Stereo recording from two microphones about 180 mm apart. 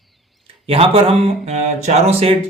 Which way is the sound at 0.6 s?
30° right (ahead or behind).